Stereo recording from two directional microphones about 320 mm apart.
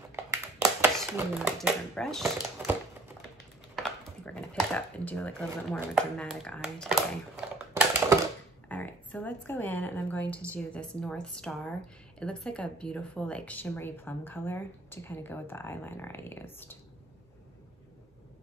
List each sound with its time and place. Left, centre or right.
0.1 s speech: centre
3.7 s speech: centre
8.6 s speech: centre